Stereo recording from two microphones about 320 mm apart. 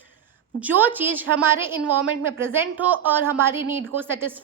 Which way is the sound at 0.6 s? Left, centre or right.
Centre.